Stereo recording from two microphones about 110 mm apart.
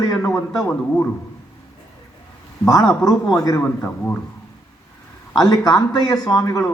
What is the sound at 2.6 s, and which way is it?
Speech, 35° left (ahead or behind).